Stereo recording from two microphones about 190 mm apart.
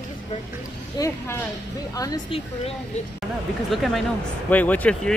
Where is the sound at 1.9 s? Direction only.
20° left (ahead or behind).